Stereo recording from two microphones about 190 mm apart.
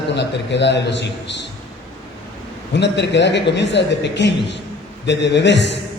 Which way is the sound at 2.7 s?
65° left (ahead or behind).